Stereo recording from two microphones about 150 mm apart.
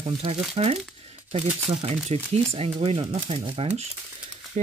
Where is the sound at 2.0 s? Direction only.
40° right (ahead or behind).